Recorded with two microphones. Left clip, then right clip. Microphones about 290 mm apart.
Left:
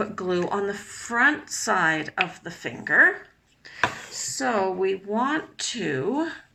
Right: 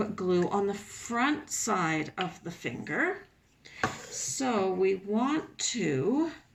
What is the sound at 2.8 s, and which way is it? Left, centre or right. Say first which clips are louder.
Speech: left 13 dB; left.